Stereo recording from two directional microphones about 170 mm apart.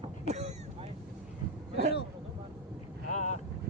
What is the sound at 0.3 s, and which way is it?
Vehicle, 40° right (ahead or behind).